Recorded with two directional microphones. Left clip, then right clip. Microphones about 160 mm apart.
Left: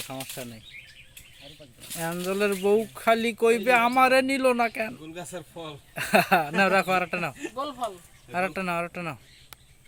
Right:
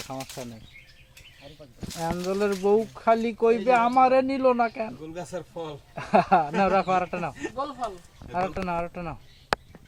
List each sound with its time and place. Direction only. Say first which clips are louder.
0.1 s speech: right 1 dB; 10° left (ahead or behind)
2.0 s speech: even; 15° left (ahead or behind)